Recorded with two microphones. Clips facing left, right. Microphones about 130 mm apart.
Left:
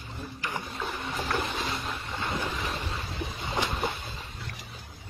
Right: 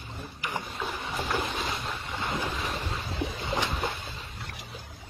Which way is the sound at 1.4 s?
Centre (ahead or behind).